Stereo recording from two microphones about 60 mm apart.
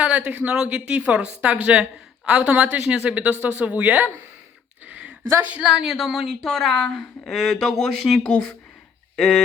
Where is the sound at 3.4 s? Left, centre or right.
Right.